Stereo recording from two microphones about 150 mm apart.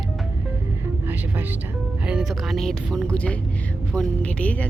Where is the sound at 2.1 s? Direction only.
Centre (ahead or behind).